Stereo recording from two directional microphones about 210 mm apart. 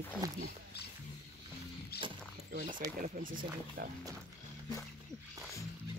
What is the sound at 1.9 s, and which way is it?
Dog, 50° left (ahead or behind).